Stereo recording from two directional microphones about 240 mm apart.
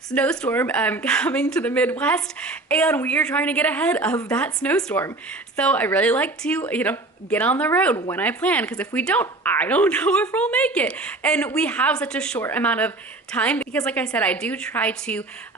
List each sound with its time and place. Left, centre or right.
0.1 s speech: centre
7.9 s speech: centre
8.2 s speech: centre